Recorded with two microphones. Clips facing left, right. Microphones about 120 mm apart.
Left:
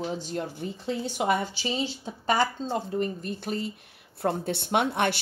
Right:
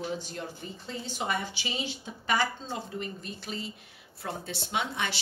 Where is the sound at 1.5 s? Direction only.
35° left (ahead or behind).